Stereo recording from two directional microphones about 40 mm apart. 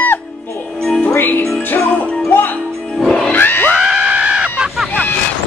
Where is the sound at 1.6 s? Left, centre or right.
Left.